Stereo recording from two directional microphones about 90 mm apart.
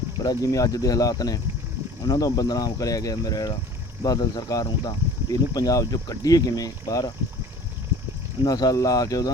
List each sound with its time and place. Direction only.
0.2 s speech: 40° left (ahead or behind)
8.4 s speech: 45° left (ahead or behind)